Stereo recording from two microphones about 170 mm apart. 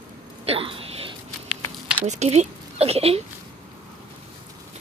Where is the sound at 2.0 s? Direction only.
40° right (ahead or behind).